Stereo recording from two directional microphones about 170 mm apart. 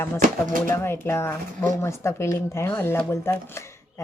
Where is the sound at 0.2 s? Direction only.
50° right (ahead or behind).